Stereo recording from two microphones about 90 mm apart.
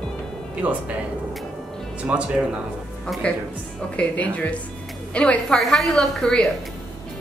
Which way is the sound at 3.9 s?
15° left (ahead or behind).